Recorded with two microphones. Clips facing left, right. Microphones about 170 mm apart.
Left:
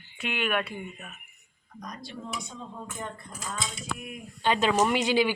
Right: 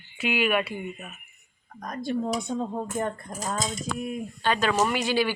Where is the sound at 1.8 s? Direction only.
50° right (ahead or behind); by 4.2 s 35° right (ahead or behind).